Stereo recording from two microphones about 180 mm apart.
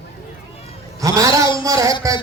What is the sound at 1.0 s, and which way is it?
A man's voice, 20° right (ahead or behind).